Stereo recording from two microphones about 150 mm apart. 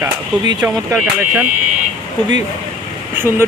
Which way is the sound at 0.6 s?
10° right (ahead or behind).